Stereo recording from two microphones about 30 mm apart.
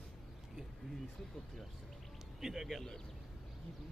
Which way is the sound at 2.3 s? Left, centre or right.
Centre.